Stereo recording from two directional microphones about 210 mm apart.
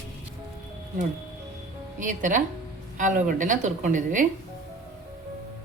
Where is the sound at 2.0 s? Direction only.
40° right (ahead or behind).